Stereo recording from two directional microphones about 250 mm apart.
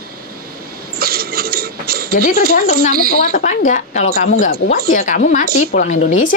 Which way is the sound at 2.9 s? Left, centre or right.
Right.